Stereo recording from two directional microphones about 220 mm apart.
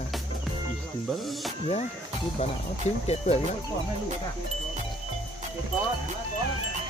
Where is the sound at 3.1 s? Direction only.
30° left (ahead or behind).